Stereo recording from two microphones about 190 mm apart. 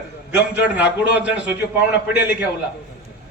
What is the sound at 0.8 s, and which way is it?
Speech, 10° right (ahead or behind).